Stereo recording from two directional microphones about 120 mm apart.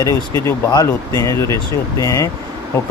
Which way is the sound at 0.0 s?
25° left (ahead or behind).